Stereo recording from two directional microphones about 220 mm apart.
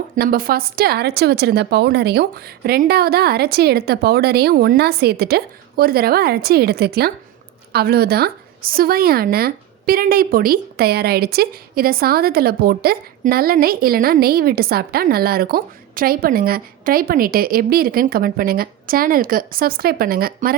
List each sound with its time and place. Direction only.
0.2 s a woman's voice: 40° right (ahead or behind)